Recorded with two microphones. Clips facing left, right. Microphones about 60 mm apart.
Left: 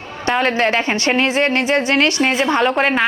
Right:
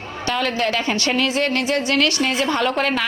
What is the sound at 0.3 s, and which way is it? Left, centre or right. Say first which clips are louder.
A woman's voice: left 5 dB; left.